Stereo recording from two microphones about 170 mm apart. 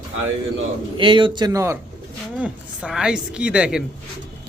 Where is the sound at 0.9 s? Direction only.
30° right (ahead or behind).